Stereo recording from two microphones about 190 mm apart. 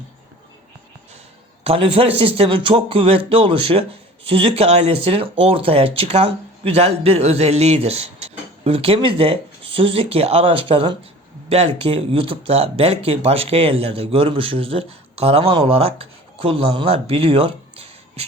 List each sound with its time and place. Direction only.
1.6 s a man's voice: 30° right (ahead or behind)